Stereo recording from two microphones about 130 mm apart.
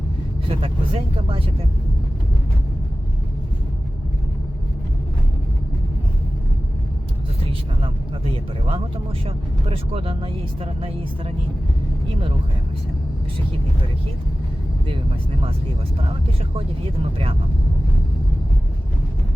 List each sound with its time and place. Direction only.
0.4 s speech: 45° right (ahead or behind)
7.8 s speech: 45° right (ahead or behind)